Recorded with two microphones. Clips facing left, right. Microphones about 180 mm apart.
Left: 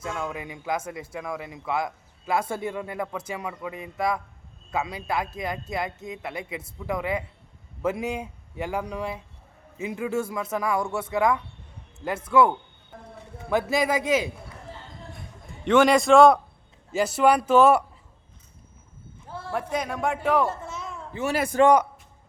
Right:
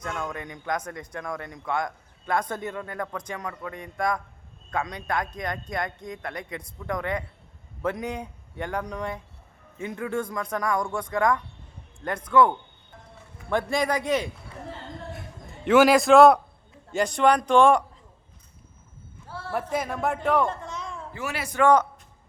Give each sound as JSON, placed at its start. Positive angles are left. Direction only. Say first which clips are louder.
{"t": 0.0, "sound": "a man's voice", "louder": "left 1 dB", "side_deg": 5}
{"t": 15.1, "sound": "a sound", "louder": "right 3 dB", "side_deg": -5}
{"t": 16.9, "sound": "a man's voice", "louder": "left 1 dB", "side_deg": 5}
{"t": 19.3, "sound": "a sound", "louder": "left 1 dB", "side_deg": 15}
{"t": 19.7, "sound": "a man's voice", "louder": "even", "side_deg": -5}
{"t": 21.1, "sound": "a man's voice", "louder": "left 7 dB", "side_deg": 25}
{"t": 21.5, "sound": "a man's voice", "louder": "left 2 dB", "side_deg": 40}